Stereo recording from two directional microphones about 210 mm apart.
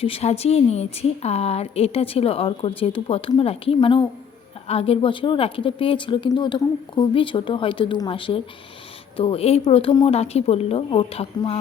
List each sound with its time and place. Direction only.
0.0 s speech: 30° left (ahead or behind)